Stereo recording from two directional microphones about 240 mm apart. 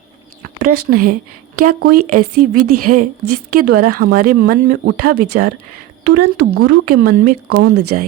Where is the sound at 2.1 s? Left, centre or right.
Right.